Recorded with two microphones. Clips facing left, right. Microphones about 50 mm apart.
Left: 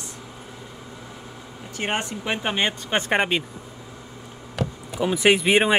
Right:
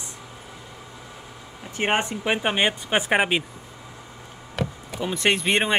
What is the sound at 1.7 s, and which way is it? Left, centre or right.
Speech, right.